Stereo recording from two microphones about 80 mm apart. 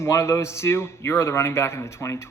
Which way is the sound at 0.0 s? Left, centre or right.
Left.